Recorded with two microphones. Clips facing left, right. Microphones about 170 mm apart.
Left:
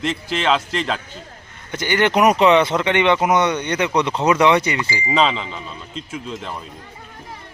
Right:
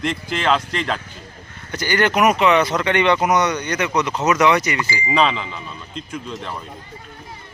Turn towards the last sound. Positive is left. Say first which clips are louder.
# even
turn(degrees=5)  # may be behind; listen again after turning